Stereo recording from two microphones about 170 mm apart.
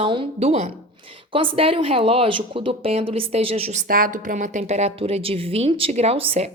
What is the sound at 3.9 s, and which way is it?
Speech, 55° right (ahead or behind).